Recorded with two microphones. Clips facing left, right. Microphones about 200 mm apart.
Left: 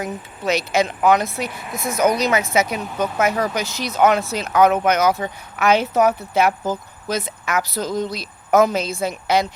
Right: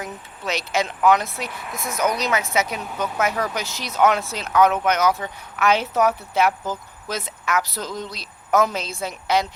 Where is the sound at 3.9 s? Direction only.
5° left (ahead or behind).